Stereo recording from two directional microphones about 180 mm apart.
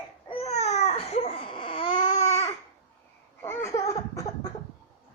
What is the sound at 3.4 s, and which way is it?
Laughter, 15° left (ahead or behind).